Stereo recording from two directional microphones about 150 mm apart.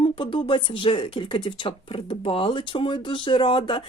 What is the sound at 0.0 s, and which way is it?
Speech, 35° left (ahead or behind).